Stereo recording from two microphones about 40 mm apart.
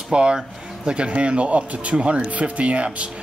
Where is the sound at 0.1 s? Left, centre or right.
Right.